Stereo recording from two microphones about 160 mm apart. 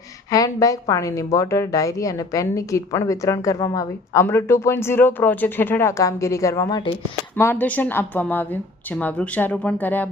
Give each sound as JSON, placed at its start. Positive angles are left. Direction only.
{"t": 0.3, "sound": "a woman's voice", "side_deg": 20}
{"t": 7.3, "sound": "speech", "side_deg": 15}